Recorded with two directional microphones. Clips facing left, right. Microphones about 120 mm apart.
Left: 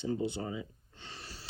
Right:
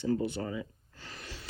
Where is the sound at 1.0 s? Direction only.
30° left (ahead or behind).